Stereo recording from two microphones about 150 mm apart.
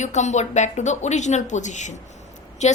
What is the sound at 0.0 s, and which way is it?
A woman's voice, 50° left (ahead or behind).